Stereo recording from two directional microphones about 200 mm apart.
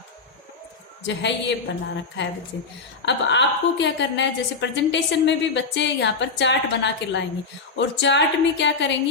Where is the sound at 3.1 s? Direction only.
60° left (ahead or behind).